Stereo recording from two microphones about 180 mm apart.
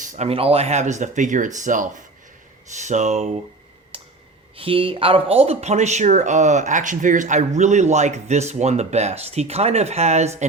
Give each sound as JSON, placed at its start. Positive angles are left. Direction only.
{"t": 0.0, "sound": "speech", "side_deg": -40}
{"t": 3.9, "sound": "a sound", "side_deg": -30}
{"t": 4.5, "sound": "speech", "side_deg": -30}